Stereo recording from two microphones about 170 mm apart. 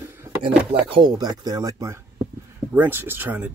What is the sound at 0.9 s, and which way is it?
Speech, 25° right (ahead or behind).